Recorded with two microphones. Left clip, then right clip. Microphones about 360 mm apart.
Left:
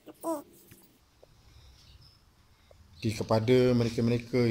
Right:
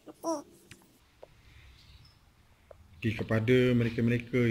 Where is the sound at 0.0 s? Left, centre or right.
Centre.